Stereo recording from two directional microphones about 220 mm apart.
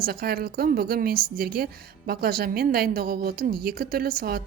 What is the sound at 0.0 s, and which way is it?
A woman's voice, 45° right (ahead or behind).